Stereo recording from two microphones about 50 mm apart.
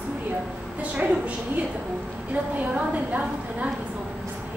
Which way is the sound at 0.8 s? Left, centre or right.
Right.